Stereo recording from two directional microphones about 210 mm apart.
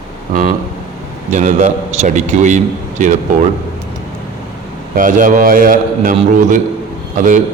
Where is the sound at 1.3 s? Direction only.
35° right (ahead or behind).